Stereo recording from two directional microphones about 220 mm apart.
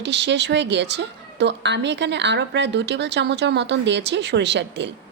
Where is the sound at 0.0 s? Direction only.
50° right (ahead or behind).